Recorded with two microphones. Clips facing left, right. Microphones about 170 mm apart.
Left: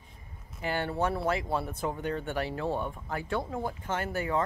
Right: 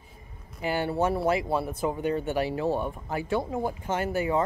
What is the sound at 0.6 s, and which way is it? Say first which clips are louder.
Speech: right 4 dB; 10° right (ahead or behind).